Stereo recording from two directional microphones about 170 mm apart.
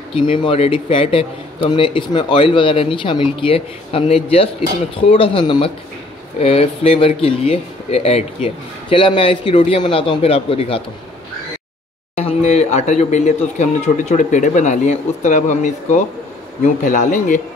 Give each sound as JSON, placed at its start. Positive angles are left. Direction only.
{"t": 0.1, "sound": "a man's voice", "side_deg": 30}
{"t": 12.2, "sound": "speech", "side_deg": 40}